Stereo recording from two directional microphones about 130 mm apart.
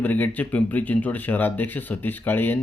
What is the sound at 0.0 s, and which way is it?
Speech, 15° left (ahead or behind).